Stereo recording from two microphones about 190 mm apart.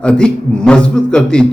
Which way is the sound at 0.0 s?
5° left (ahead or behind).